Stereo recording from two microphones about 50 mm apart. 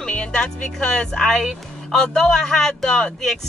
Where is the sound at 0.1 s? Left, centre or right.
Left.